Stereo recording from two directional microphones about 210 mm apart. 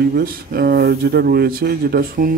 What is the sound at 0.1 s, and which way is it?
Speech, 45° right (ahead or behind).